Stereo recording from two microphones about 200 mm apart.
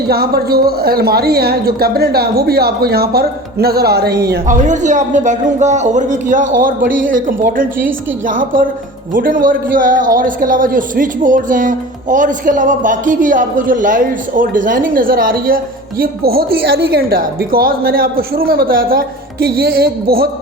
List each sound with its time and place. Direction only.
0.1 s speech: 50° right (ahead or behind)
4.4 s speech: 40° right (ahead or behind)